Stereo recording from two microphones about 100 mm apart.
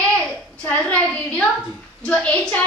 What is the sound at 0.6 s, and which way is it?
A woman's voice, 15° left (ahead or behind).